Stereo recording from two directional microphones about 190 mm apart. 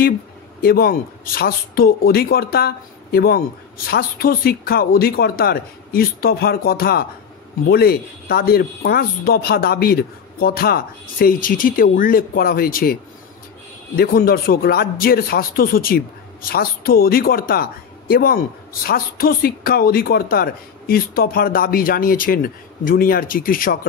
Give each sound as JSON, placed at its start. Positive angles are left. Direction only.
{"t": 0.6, "sound": "speech", "side_deg": 50}